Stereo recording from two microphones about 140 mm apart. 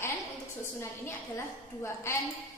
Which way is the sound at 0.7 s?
20° left (ahead or behind).